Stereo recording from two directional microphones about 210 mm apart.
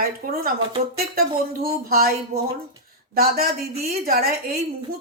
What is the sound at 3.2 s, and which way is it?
A woman's voice, 45° right (ahead or behind).